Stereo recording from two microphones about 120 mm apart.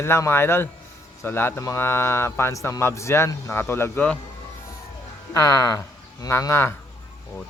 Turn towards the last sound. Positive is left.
turn(degrees=20)  # may be behind; listen again after turning